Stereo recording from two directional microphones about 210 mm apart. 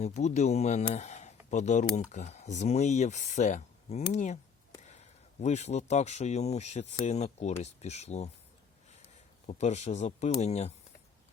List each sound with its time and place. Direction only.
0.0 s speech: 35° left (ahead or behind)
9.5 s speech: 30° left (ahead or behind)